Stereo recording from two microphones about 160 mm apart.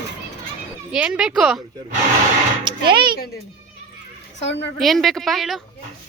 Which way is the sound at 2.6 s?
30° right (ahead or behind).